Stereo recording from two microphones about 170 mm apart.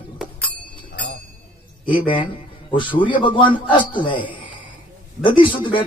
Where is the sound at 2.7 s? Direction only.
30° left (ahead or behind).